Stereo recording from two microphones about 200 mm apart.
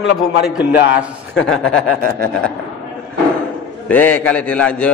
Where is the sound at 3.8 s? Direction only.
10° left (ahead or behind).